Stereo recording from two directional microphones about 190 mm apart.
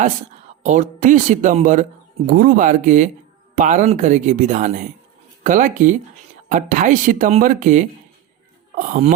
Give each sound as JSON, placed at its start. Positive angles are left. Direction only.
{"t": 0.6, "sound": "speech", "side_deg": -40}